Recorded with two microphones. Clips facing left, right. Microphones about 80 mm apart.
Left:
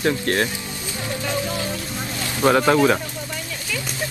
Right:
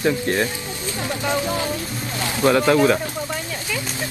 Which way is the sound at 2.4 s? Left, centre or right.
Centre.